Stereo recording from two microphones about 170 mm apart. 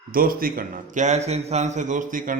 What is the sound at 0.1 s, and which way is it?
A man's voice, 55° right (ahead or behind).